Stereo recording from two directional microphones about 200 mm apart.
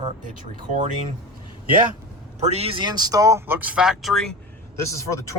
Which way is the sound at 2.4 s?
30° right (ahead or behind).